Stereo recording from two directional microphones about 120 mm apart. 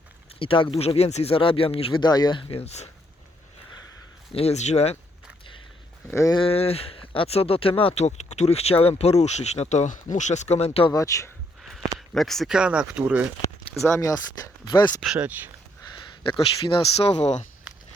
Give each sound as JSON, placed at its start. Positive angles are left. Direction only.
{"t": 0.3, "sound": "speech", "side_deg": 45}
{"t": 2.0, "sound": "speech", "side_deg": 35}
{"t": 4.3, "sound": "speech", "side_deg": 55}
{"t": 6.1, "sound": "speech", "side_deg": 25}
{"t": 6.3, "sound": "speech", "side_deg": 50}
{"t": 8.0, "sound": "speech", "side_deg": 70}
{"t": 10.9, "sound": "speech", "side_deg": 25}
{"t": 11.9, "sound": "speech", "side_deg": 0}
{"t": 13.8, "sound": "speech", "side_deg": 25}
{"t": 14.7, "sound": "speech", "side_deg": 40}
{"t": 15.0, "sound": "speech", "side_deg": -5}
{"t": 16.6, "sound": "speech", "side_deg": 55}